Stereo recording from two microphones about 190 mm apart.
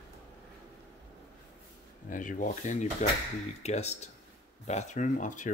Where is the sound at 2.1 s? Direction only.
45° left (ahead or behind).